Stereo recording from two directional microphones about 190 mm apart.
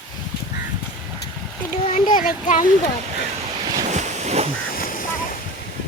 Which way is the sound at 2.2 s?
45° left (ahead or behind).